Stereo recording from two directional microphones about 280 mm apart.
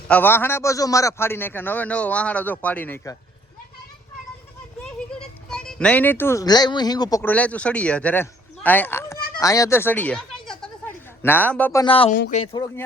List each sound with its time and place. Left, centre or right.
0.1 s a man's voice: centre
4.9 s speech: centre
12.1 s speech: left
12.5 s a man's voice: centre